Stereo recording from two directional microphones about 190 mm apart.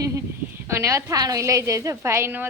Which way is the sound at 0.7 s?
15° right (ahead or behind).